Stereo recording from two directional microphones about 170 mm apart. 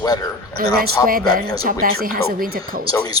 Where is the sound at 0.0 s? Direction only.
20° left (ahead or behind).